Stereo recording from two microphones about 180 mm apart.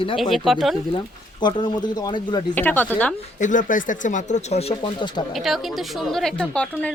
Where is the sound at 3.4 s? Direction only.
45° left (ahead or behind); by 5.3 s 30° left (ahead or behind).